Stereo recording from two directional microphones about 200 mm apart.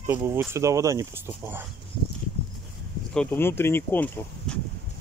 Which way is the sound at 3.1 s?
5° left (ahead or behind).